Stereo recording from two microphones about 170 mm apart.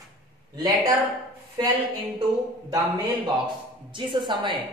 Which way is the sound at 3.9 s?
30° right (ahead or behind).